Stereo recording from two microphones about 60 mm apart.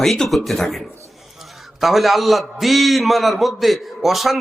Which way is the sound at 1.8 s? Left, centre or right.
Centre.